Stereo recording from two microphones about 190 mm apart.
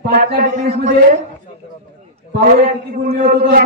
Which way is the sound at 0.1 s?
45° right (ahead or behind).